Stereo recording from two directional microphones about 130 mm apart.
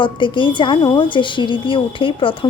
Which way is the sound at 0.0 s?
40° left (ahead or behind).